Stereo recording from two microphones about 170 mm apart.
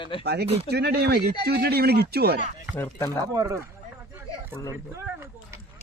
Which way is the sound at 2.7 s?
10° left (ahead or behind).